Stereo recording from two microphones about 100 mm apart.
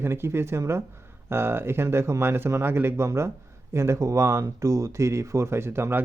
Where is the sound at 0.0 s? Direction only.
25° right (ahead or behind).